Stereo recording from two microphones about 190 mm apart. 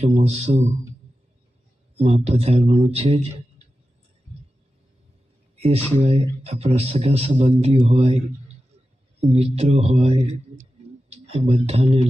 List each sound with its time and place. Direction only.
0.0 s speech: 35° right (ahead or behind)
2.0 s speech: 30° right (ahead or behind)
5.6 s speech: 35° right (ahead or behind)
9.3 s speech: 30° right (ahead or behind)